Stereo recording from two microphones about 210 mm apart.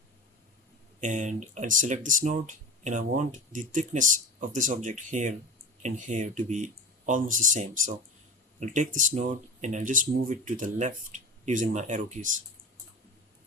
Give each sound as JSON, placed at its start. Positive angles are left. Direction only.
{"t": 1.0, "sound": "speech", "side_deg": -35}